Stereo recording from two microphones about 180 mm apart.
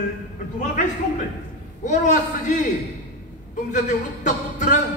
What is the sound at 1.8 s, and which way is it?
Speech, 40° left (ahead or behind).